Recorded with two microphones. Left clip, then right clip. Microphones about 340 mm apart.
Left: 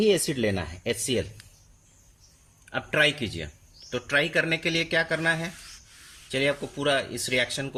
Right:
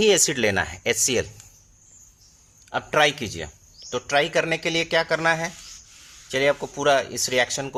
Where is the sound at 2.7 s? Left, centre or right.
Centre.